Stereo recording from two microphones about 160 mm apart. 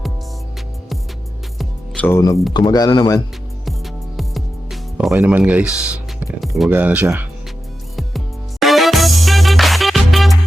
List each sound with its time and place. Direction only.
1.5 s music: 10° left (ahead or behind)
2.5 s speech: 25° left (ahead or behind)
4.2 s music: centre (ahead or behind)
5.1 s speech: 10° right (ahead or behind)
6.4 s music: centre (ahead or behind)
6.7 s speech: 10° right (ahead or behind)
7.9 s music: centre (ahead or behind)